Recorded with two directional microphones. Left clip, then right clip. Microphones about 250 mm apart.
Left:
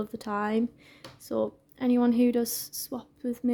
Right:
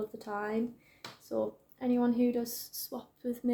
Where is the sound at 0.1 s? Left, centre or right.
Left.